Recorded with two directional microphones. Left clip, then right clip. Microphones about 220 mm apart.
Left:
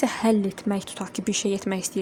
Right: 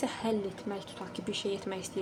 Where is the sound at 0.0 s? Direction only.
50° left (ahead or behind).